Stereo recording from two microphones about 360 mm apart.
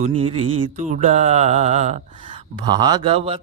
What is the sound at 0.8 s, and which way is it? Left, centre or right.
Speech, centre.